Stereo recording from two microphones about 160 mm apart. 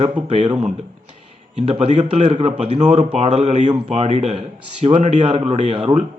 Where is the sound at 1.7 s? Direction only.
45° right (ahead or behind).